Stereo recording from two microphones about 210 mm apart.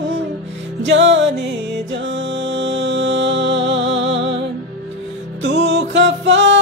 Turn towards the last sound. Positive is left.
turn(degrees=-60)  # may be behind; listen again after turning